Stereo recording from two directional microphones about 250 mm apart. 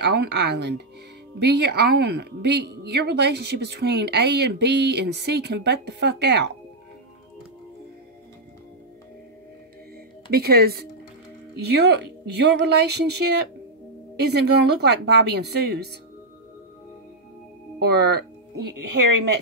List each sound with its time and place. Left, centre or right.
0.0 s a woman's voice: right
10.3 s a woman's voice: right
17.7 s music: right